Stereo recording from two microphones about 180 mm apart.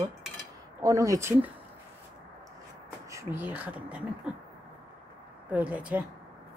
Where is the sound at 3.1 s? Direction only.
15° right (ahead or behind).